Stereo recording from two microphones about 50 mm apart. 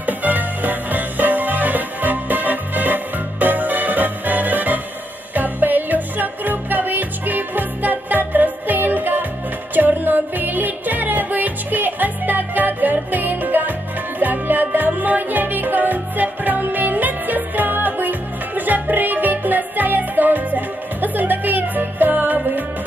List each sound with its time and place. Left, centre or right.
0.0 s music: right